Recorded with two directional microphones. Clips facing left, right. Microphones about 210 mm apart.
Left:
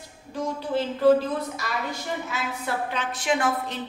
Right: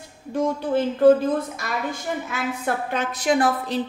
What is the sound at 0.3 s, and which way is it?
Speech, 50° right (ahead or behind).